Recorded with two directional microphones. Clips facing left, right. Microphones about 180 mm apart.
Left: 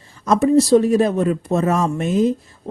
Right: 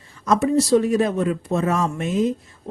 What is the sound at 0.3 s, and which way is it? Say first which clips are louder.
Speech: left 4 dB; 35° left (ahead or behind).